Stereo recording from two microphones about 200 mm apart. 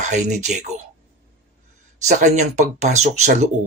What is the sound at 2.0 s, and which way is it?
Speech, 35° right (ahead or behind).